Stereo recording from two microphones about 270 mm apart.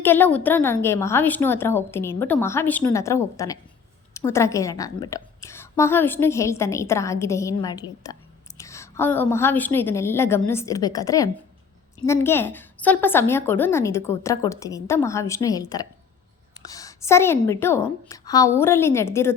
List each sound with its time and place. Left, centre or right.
0.0 s a woman's voice: centre